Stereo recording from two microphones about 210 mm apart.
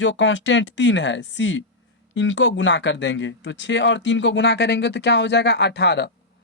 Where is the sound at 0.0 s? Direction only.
60° left (ahead or behind).